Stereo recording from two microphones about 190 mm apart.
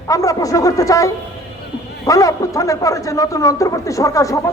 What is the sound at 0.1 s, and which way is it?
A man's voice, 20° left (ahead or behind).